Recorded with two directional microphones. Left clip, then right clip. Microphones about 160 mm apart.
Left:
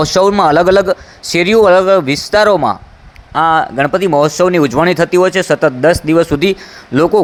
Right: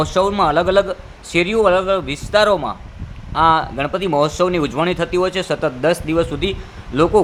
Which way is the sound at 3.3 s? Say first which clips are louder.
Left 3 dB; 25° left (ahead or behind).